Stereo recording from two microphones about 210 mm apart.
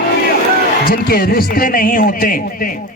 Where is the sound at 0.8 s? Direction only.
45° left (ahead or behind).